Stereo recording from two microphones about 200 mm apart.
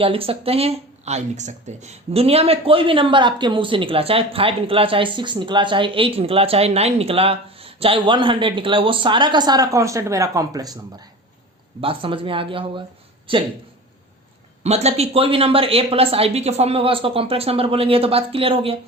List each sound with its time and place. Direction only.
0.0 s speech: 30° right (ahead or behind)
14.6 s speech: 30° right (ahead or behind)